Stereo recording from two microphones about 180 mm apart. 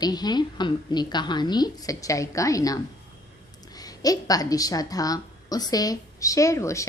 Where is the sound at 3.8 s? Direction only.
20° left (ahead or behind).